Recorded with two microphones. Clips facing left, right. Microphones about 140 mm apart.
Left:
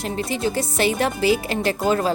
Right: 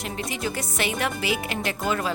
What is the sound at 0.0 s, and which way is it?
Speech, 30° left (ahead or behind).